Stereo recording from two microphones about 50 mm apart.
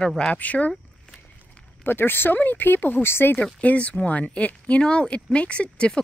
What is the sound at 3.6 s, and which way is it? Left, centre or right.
Speech, left.